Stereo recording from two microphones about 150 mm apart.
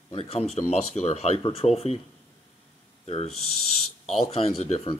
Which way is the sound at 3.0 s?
45° left (ahead or behind).